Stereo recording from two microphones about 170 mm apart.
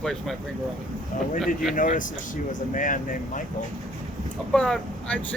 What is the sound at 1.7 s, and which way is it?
Speech, 50° left (ahead or behind).